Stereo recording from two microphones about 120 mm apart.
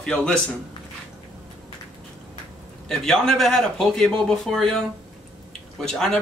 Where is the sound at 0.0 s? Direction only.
5° left (ahead or behind).